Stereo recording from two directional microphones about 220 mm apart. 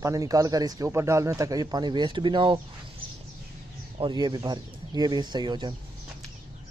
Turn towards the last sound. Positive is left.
turn(degrees=-20)  # may be behind; listen again after turning